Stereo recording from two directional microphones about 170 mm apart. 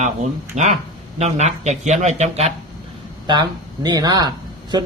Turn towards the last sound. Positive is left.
turn(degrees=-25)  # may be behind; listen again after turning